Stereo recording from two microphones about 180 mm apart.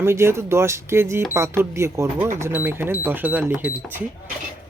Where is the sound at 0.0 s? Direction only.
15° right (ahead or behind).